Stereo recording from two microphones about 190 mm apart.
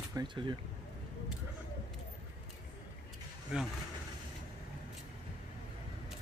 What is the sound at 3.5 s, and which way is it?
Speech, 5° right (ahead or behind).